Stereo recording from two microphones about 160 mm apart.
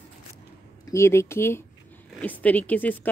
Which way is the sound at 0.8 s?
15° left (ahead or behind).